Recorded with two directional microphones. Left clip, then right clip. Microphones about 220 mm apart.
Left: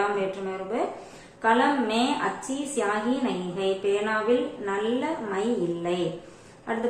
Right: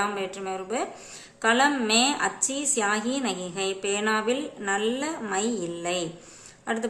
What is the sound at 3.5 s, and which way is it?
Speech, 30° right (ahead or behind).